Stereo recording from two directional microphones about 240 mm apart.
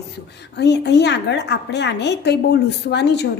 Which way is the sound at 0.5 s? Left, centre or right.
Left.